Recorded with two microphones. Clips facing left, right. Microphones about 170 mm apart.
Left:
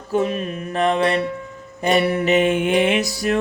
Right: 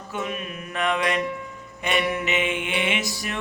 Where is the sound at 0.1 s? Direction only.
35° left (ahead or behind).